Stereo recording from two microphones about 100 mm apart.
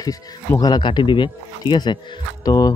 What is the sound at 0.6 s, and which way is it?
Speech, 50° left (ahead or behind).